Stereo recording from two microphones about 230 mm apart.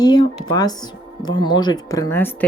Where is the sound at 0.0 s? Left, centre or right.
Centre.